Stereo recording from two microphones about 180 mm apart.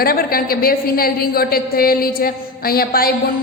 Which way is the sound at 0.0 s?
55° left (ahead or behind).